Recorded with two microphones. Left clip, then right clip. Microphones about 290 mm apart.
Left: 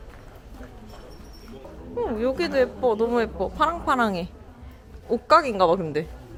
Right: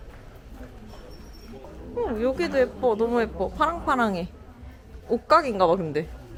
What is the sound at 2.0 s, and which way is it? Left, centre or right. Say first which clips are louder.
Speech: even; centre.